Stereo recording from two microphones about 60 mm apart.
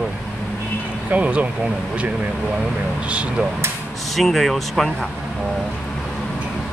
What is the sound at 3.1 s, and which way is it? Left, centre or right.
Speech, right.